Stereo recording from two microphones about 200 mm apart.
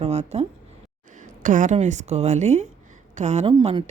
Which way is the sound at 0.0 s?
35° right (ahead or behind).